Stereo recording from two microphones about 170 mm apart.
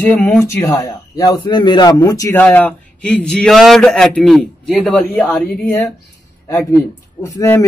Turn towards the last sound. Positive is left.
turn(degrees=15)  # may be behind; listen again after turning